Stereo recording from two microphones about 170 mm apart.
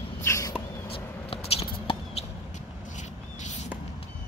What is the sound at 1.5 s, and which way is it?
Basketball bounce, 35° left (ahead or behind).